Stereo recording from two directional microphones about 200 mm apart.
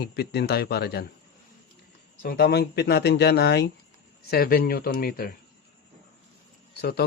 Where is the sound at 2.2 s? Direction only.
50° left (ahead or behind).